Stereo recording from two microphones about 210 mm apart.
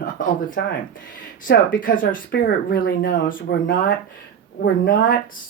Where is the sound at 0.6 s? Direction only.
50° left (ahead or behind).